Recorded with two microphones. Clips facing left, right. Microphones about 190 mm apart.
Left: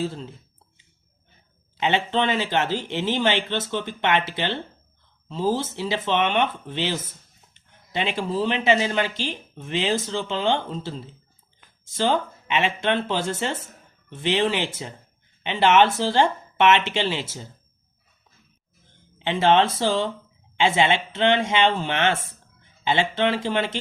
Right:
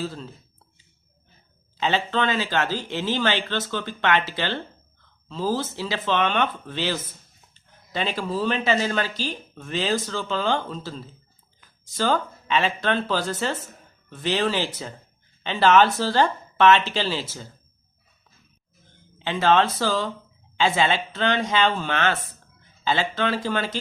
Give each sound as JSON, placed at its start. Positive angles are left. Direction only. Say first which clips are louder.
{"t": 1.8, "sound": "speech", "louder": "left 1 dB", "side_deg": 20}
{"t": 19.2, "sound": "speech", "louder": "left 1 dB", "side_deg": 25}